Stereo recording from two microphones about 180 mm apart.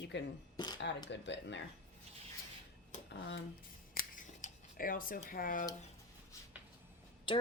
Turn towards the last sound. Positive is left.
turn(degrees=25)  # may be behind; listen again after turning